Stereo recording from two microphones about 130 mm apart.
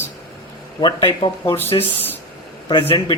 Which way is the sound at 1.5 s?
15° left (ahead or behind).